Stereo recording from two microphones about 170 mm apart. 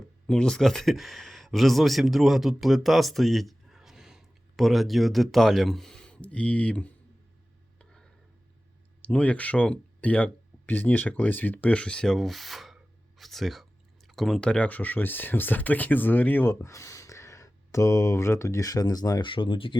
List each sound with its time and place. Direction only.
0.3 s speech: 5° left (ahead or behind)
7.8 s a sound: 5° left (ahead or behind)
9.0 s speech: 5° left (ahead or behind); by 19.7 s 30° left (ahead or behind)